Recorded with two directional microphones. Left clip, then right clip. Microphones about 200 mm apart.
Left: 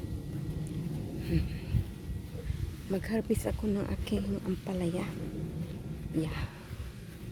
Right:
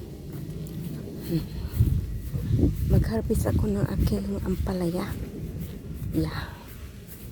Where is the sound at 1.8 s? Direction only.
55° right (ahead or behind).